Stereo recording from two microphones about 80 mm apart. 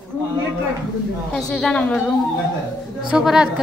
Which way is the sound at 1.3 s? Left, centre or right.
Centre.